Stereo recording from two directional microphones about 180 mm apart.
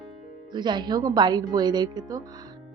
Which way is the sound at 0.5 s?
25° right (ahead or behind).